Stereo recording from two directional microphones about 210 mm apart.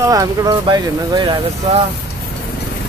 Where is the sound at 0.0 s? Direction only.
15° right (ahead or behind).